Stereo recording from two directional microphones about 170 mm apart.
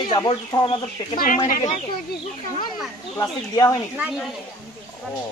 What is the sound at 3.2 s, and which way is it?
Speech, 20° left (ahead or behind).